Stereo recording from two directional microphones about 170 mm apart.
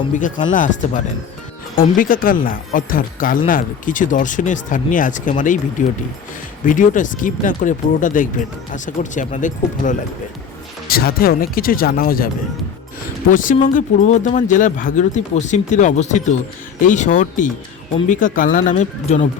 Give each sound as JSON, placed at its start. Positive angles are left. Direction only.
{"t": 0.2, "sound": "speech", "side_deg": 50}
{"t": 10.8, "sound": "speech", "side_deg": 60}
{"t": 13.3, "sound": "speech", "side_deg": 50}